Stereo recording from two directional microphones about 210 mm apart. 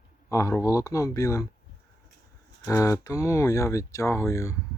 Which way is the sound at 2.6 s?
15° left (ahead or behind).